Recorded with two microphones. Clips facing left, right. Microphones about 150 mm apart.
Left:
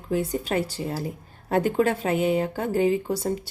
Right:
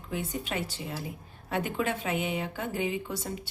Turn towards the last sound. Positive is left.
turn(degrees=40)  # may be behind; listen again after turning